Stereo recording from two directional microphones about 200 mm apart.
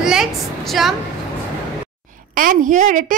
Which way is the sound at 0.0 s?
5° right (ahead or behind).